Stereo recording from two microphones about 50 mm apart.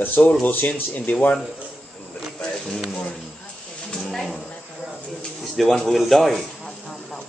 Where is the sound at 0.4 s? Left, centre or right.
Left.